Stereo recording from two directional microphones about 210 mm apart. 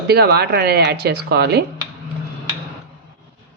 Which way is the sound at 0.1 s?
50° right (ahead or behind).